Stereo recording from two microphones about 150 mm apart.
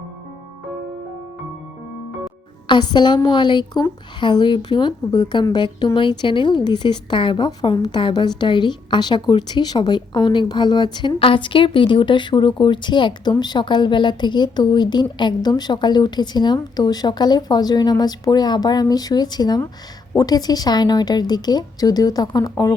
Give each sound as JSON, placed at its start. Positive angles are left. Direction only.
{"t": 2.6, "sound": "a woman's voice", "side_deg": 30}